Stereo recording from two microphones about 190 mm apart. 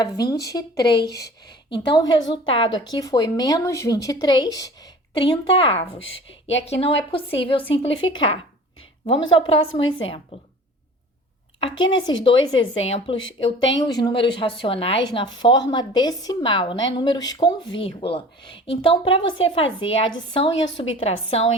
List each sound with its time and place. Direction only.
0.0 s a woman's voice: 20° left (ahead or behind)
1.0 s a woman's voice: 60° left (ahead or behind)
1.7 s a woman's voice: 25° left (ahead or behind)
6.0 s a woman's voice: 80° left
6.7 s a woman's voice: 30° left (ahead or behind)
11.9 s a woman's voice: 25° left (ahead or behind)